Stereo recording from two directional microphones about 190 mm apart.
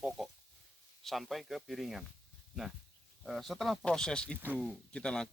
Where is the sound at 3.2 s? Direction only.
Centre (ahead or behind).